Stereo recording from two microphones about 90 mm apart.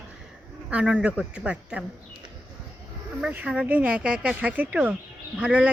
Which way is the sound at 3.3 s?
15° right (ahead or behind).